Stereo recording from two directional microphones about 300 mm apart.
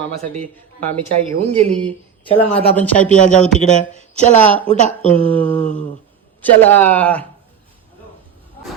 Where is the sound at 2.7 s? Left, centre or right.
Centre.